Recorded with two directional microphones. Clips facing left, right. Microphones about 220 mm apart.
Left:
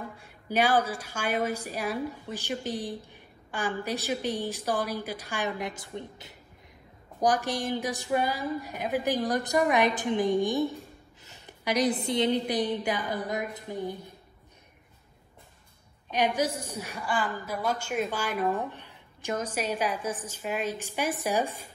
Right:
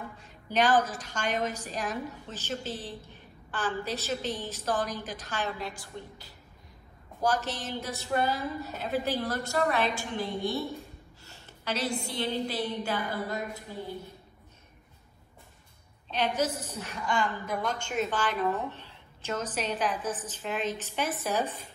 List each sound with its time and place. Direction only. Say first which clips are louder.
0.2 s a woman's voice: left 1 dB; 10° left (ahead or behind)
16.1 s a woman's voice: left 2 dB; 15° left (ahead or behind)